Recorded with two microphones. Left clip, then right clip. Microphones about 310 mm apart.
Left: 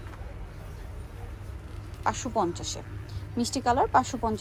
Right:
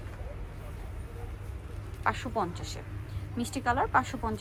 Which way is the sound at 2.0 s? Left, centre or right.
Centre.